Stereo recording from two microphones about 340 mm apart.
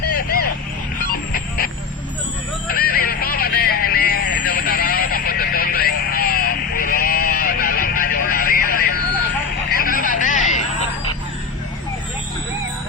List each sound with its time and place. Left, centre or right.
1.3 s vehicle: left
2.6 s music: left
9.7 s vehicle: left